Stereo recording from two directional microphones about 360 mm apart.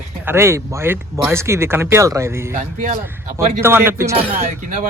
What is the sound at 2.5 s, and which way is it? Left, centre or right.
Speech, right.